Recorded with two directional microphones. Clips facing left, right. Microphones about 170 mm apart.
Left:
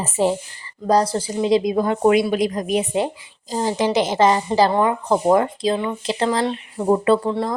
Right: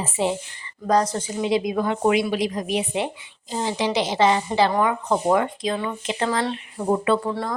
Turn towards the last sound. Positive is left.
turn(degrees=25)  # may be behind; listen again after turning